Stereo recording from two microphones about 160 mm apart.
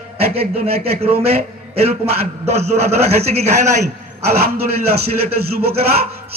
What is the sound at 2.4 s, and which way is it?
A man's voice, 45° right (ahead or behind).